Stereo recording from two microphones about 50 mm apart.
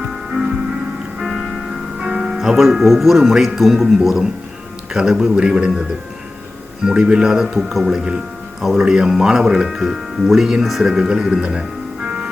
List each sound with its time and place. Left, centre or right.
0.0 s music: centre
1.3 s music: centre
2.0 s music: centre
2.6 s speech: centre
6.8 s speech: centre
12.0 s music: right